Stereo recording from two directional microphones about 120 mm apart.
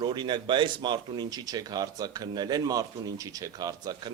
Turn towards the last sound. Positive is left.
turn(degrees=-35)  # may be behind; listen again after turning